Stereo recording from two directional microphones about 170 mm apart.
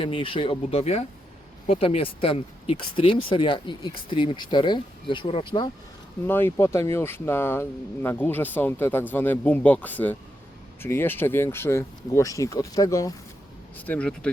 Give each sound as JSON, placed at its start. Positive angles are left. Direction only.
{"t": 0.0, "sound": "speech", "side_deg": 30}
{"t": 6.2, "sound": "speech", "side_deg": 10}
{"t": 13.8, "sound": "speech", "side_deg": 10}